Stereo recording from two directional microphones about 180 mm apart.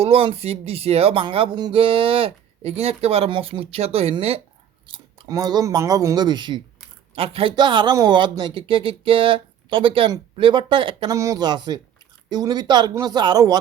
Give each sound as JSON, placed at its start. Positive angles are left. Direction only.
{"t": 0.0, "sound": "speech", "side_deg": -30}